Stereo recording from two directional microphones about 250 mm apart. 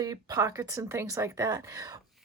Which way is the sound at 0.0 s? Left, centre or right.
Centre.